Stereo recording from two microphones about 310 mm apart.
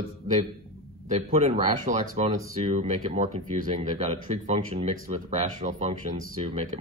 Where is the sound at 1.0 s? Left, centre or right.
Right.